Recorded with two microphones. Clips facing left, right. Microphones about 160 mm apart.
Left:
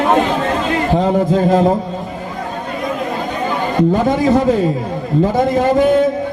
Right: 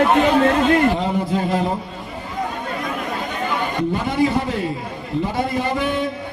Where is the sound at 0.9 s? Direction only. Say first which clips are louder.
Left 7 dB; 45° left (ahead or behind).